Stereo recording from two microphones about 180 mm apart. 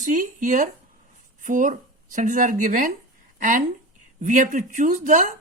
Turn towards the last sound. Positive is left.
turn(degrees=-45)  # may be behind; listen again after turning